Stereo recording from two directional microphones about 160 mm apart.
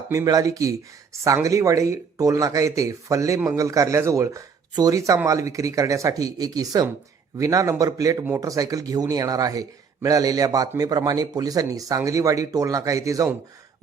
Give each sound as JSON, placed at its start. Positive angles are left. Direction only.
{"t": 0.1, "sound": "speech", "side_deg": -20}